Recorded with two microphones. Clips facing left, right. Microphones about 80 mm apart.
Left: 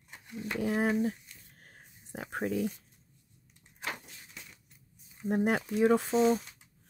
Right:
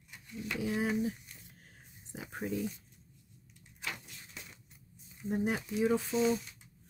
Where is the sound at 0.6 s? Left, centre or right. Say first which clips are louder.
Left 4 dB; left.